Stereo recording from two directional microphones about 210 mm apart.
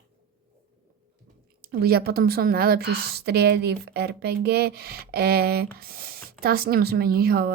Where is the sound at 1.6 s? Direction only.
45° right (ahead or behind).